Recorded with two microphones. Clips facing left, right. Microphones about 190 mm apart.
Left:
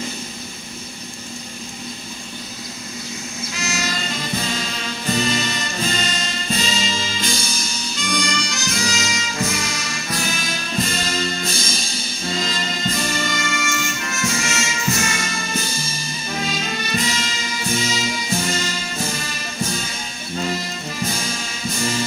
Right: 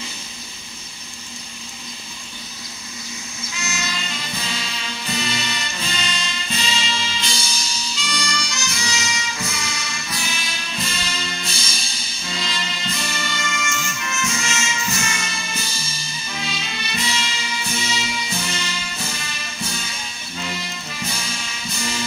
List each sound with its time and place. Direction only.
3.5 s music: 45° left (ahead or behind)